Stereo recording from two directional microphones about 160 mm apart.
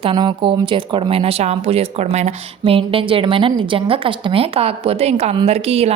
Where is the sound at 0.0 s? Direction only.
30° right (ahead or behind).